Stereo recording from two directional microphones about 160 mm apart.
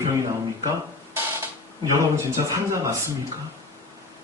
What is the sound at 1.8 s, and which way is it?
Speech, 20° right (ahead or behind).